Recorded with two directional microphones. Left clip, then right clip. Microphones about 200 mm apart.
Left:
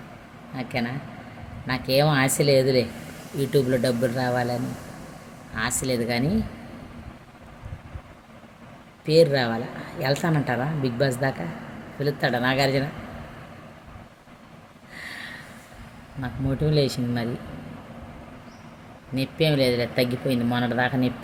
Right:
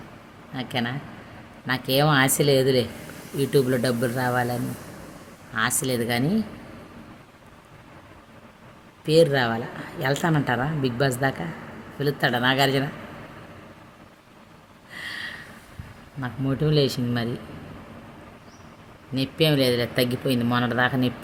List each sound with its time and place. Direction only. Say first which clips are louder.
0.5 s speech: right 1 dB; 20° right (ahead or behind)
9.0 s speech: even; 15° right (ahead or behind)
16.2 s speech: right 1 dB; 15° right (ahead or behind)
19.1 s speech: right 1 dB; 20° right (ahead or behind)